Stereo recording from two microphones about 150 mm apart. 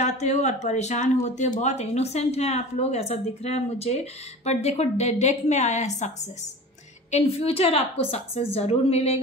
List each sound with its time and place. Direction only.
0.0 s a woman's voice: 50° left (ahead or behind)